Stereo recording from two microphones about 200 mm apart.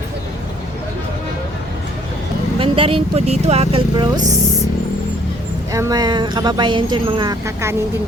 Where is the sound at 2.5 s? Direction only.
25° right (ahead or behind).